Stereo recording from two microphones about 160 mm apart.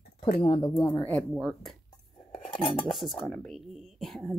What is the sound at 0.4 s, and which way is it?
Speech, 30° left (ahead or behind).